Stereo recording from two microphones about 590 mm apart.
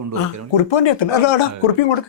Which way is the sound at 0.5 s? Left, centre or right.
Left.